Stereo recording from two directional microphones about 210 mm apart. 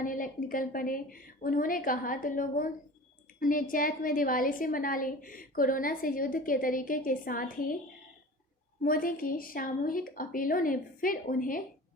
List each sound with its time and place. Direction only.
0.0 s a woman's voice: 40° left (ahead or behind)
8.8 s a woman's voice: 40° left (ahead or behind)